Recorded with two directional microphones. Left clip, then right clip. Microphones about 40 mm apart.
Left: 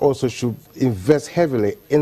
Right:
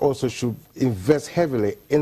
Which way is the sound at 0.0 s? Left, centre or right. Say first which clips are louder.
Left 3 dB; left.